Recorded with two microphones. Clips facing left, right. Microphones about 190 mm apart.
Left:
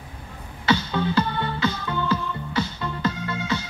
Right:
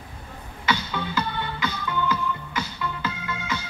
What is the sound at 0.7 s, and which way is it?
Music, 30° left (ahead or behind).